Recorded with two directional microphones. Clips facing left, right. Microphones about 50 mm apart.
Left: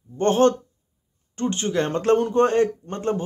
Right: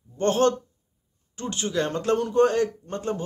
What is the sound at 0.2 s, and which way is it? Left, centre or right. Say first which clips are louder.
Speech: left 3 dB; left.